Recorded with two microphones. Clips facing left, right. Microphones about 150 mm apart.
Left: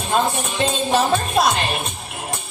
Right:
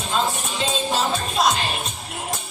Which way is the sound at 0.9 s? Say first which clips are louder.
Left 6 dB; 60° left (ahead or behind).